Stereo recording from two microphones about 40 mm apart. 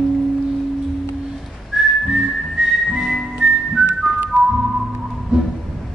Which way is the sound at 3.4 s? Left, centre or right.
Centre.